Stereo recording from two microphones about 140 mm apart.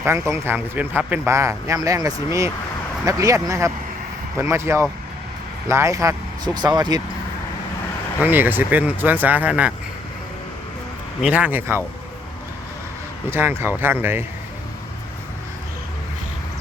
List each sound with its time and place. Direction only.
0.0 s speech: 20° right (ahead or behind)
8.2 s speech: 15° right (ahead or behind)
11.2 s speech: 10° right (ahead or behind)
13.3 s speech: 15° right (ahead or behind)